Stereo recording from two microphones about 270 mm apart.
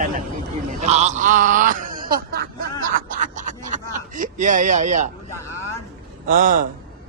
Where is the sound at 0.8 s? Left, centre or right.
Right.